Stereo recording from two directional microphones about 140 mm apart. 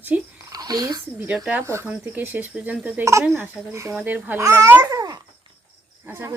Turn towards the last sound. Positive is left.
turn(degrees=-15)  # may be behind; listen again after turning